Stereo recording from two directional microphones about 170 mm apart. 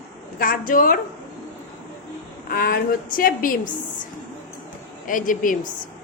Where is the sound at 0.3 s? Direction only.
55° left (ahead or behind).